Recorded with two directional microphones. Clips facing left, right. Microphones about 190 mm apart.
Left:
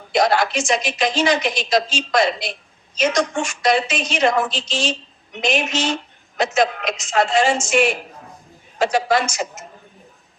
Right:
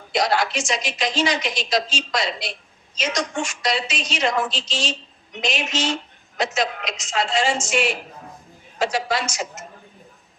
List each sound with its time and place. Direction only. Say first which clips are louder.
0.1 s a woman's voice: left 4 dB; 50° left (ahead or behind)